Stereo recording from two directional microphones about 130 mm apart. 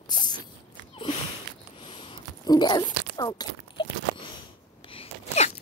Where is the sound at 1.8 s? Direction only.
40° left (ahead or behind).